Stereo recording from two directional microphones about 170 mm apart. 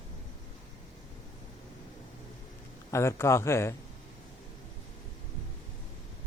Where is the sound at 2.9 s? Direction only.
15° left (ahead or behind).